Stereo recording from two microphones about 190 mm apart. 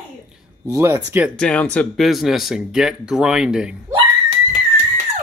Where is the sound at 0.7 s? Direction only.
15° right (ahead or behind).